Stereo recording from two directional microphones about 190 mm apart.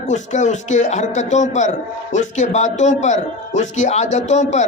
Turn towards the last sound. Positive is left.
turn(degrees=35)  # may be behind; listen again after turning